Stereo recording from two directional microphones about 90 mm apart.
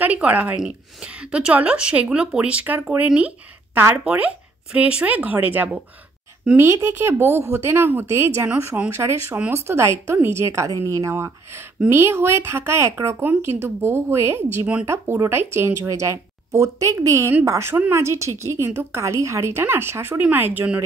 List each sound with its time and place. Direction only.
0.0 s a woman's voice: 15° right (ahead or behind)